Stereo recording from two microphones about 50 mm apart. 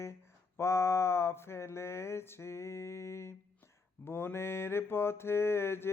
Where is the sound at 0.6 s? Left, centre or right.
Left.